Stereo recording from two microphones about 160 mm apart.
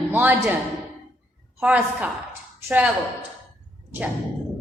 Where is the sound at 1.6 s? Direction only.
5° right (ahead or behind).